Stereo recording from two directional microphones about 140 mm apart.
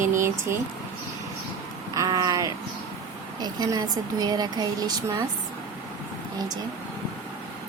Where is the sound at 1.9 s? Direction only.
25° right (ahead or behind).